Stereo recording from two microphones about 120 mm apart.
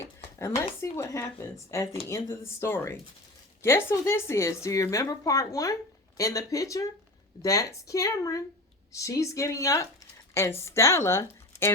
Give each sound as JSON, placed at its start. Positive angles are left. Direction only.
{"t": 0.3, "sound": "a woman's voice", "side_deg": 25}